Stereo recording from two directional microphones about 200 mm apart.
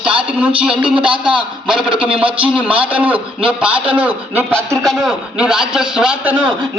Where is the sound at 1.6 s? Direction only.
5° right (ahead or behind).